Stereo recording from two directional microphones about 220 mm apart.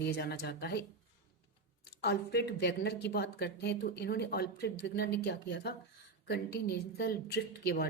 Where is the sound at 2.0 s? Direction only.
50° left (ahead or behind).